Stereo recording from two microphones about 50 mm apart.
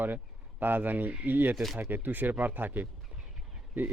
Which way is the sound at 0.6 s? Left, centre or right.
Right.